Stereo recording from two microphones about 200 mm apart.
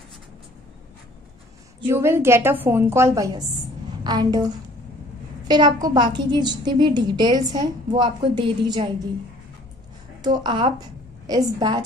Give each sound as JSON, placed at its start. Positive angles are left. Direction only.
{"t": 1.9, "sound": "a woman's voice", "side_deg": -10}
{"t": 5.5, "sound": "a woman's voice", "side_deg": -20}
{"t": 10.2, "sound": "a woman's voice", "side_deg": -20}